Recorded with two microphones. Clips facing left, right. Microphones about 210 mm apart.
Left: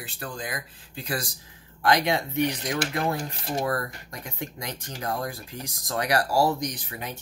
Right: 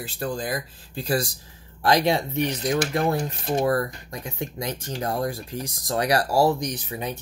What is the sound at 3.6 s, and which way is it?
Speech, 25° right (ahead or behind).